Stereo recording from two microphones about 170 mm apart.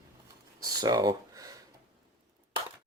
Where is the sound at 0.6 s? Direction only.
20° right (ahead or behind).